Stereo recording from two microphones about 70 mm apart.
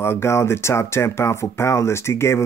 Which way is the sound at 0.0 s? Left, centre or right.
Left.